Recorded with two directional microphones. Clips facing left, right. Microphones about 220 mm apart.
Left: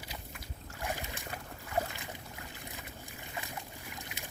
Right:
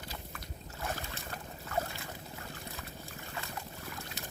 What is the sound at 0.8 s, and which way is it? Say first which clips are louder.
Boat: left 1 dB; 15° left (ahead or behind).